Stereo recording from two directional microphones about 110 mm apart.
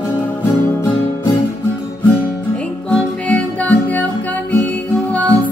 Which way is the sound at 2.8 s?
10° left (ahead or behind).